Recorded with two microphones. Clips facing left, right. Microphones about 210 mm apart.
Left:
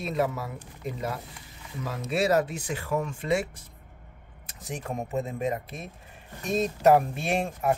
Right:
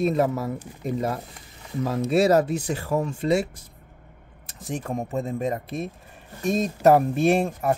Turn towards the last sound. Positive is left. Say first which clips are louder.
# right 7 dB
turn(degrees=-35)  # may be behind; listen again after turning